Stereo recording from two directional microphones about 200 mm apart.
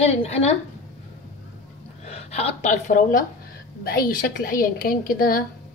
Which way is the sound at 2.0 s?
30° left (ahead or behind).